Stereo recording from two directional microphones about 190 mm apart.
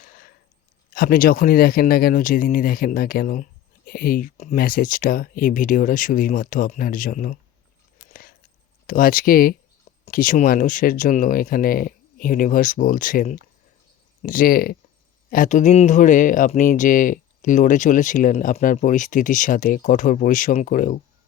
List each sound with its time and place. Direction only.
0.9 s speech: 50° left (ahead or behind)
8.9 s speech: 45° left (ahead or behind)